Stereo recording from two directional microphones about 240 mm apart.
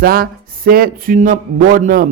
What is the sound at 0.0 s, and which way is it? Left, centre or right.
A man's voice, right.